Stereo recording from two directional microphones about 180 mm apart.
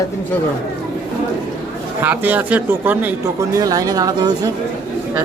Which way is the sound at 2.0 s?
10° right (ahead or behind).